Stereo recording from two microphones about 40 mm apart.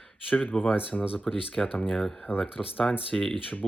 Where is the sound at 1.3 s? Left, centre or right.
Centre.